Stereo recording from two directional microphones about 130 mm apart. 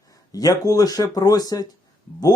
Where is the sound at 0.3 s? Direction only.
30° left (ahead or behind).